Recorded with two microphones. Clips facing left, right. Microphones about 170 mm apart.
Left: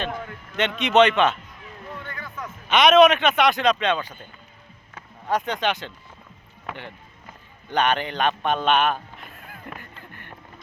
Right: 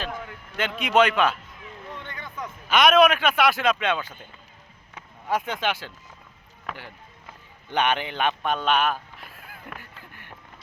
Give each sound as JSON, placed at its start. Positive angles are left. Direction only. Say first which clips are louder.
{"t": 0.3, "sound": "speech", "louder": "left 4 dB", "side_deg": -5}
{"t": 2.0, "sound": "music", "louder": "even", "side_deg": -20}
{"t": 2.6, "sound": "speech", "louder": "left 3 dB", "side_deg": 0}
{"t": 5.5, "sound": "speech", "louder": "left 3 dB", "side_deg": -5}
{"t": 7.7, "sound": "speech", "louder": "left 2 dB", "side_deg": -10}
{"t": 8.4, "sound": "a sound", "louder": "left 3 dB", "side_deg": 0}